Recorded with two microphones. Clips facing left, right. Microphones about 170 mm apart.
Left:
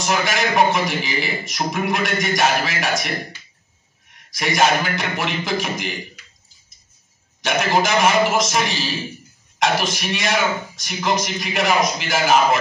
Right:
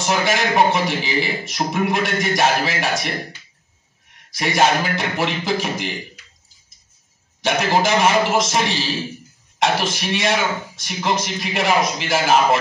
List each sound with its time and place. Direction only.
0.0 s a man's voice: 30° right (ahead or behind)
4.3 s a man's voice: 30° right (ahead or behind)
7.4 s a man's voice: 30° right (ahead or behind)